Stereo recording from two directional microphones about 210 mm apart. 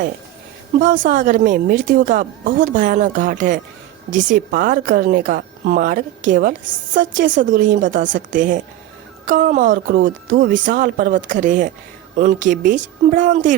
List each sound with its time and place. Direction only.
0.8 s a woman's voice: 40° right (ahead or behind)